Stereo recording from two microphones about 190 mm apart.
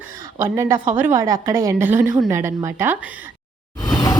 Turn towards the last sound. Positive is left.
turn(degrees=20)  # may be behind; listen again after turning